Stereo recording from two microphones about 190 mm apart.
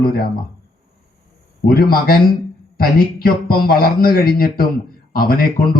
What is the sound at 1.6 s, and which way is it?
Speech, 50° left (ahead or behind).